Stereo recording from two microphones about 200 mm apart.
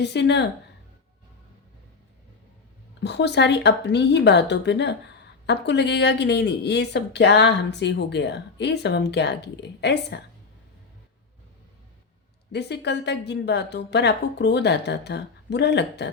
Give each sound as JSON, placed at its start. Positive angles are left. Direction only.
{"t": 0.0, "sound": "speech", "side_deg": 60}
{"t": 3.0, "sound": "speech", "side_deg": 60}
{"t": 12.5, "sound": "speech", "side_deg": 55}